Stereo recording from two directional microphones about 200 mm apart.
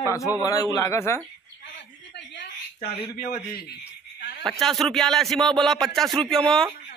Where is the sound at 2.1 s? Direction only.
55° left (ahead or behind).